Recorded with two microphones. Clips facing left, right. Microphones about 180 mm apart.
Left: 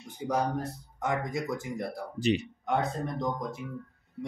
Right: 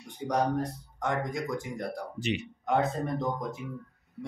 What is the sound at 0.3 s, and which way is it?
Speech, 5° left (ahead or behind).